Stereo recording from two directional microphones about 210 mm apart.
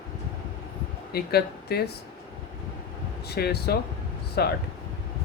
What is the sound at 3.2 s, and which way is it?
Speech, 50° left (ahead or behind).